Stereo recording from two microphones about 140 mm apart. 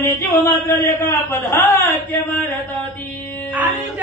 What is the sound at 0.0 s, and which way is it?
A man's voice, 20° left (ahead or behind).